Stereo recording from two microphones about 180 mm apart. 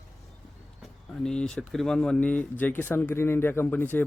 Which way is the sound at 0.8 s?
5° left (ahead or behind).